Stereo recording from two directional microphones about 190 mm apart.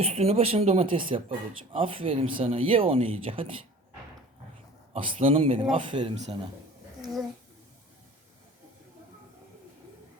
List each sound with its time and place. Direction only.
0.0 s speech: 35° right (ahead or behind)
4.9 s speech: 30° right (ahead or behind)